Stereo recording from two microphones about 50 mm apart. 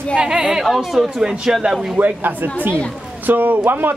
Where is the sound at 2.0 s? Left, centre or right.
Right.